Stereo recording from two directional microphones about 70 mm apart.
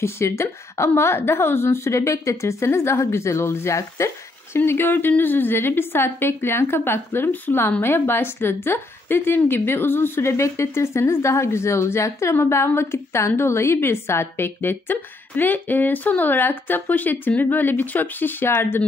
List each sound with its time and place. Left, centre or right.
0.0 s a woman's voice: left
4.6 s a woman's voice: left